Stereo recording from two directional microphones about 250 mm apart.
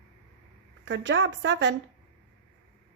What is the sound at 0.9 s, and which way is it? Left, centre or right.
Speech, right.